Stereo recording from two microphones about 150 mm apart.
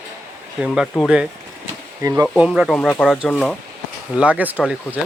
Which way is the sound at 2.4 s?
Centre (ahead or behind).